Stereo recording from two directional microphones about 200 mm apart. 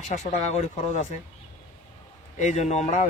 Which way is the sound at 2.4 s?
35° left (ahead or behind).